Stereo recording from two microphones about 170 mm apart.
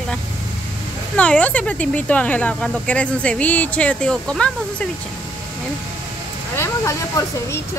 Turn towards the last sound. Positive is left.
turn(degrees=15)  # may be behind; listen again after turning